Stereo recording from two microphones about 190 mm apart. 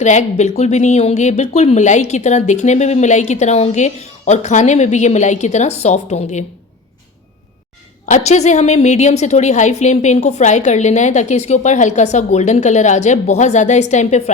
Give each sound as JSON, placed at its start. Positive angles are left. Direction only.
{"t": 0.0, "sound": "speech", "side_deg": 40}
{"t": 8.0, "sound": "speech", "side_deg": 40}